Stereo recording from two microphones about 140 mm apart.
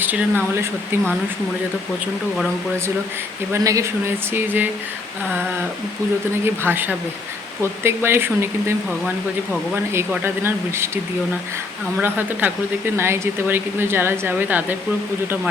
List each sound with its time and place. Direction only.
0.0 s a woman's voice: 15° right (ahead or behind)
3.5 s a woman's voice: 25° right (ahead or behind)
6.4 s a woman's voice: 15° right (ahead or behind)
12.0 s a woman's voice: 15° right (ahead or behind)